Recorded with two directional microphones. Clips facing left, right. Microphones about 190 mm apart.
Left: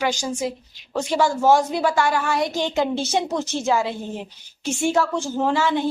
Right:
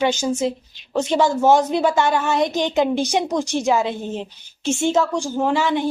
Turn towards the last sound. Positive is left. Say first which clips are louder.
# right 1 dB
turn(degrees=-15)  # may be behind; listen again after turning